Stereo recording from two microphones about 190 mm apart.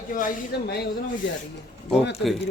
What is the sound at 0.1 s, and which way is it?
Speech, 45° left (ahead or behind).